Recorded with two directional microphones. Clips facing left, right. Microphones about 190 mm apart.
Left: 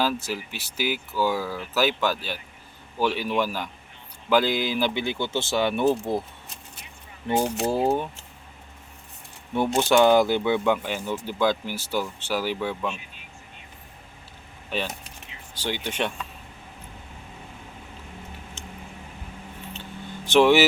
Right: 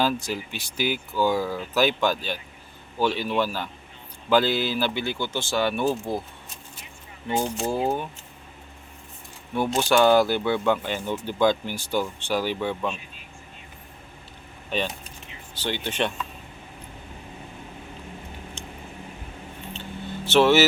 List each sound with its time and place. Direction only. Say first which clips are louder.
0.0 s speech: right 1 dB; 5° left (ahead or behind); by 5.9 s 20° left (ahead or behind)
7.3 s speech: left 2 dB; 20° left (ahead or behind)
7.7 s speech: left 2 dB; 5° left (ahead or behind)
9.7 s speech: even; 20° left (ahead or behind)
14.7 s speech: right 2 dB; 5° left (ahead or behind)
20.2 s speech: left 1 dB; 15° left (ahead or behind)